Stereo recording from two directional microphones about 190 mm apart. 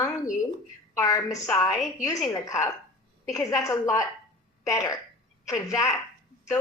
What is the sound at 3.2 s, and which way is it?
A woman's voice, 15° left (ahead or behind).